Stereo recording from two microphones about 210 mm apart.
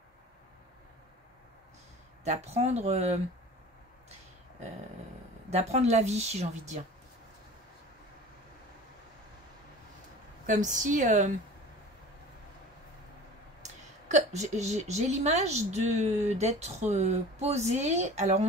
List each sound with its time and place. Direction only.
2.2 s a woman's voice: 30° right (ahead or behind)
5.5 s a woman's voice: 30° right (ahead or behind)
10.4 s a woman's voice: 35° right (ahead or behind)
13.6 s a woman's voice: 35° right (ahead or behind)